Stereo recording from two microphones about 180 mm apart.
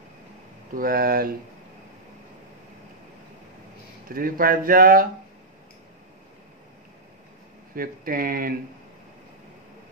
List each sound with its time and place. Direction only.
0.7 s speech: 55° right (ahead or behind)
4.1 s speech: 55° right (ahead or behind)
7.7 s speech: 50° right (ahead or behind)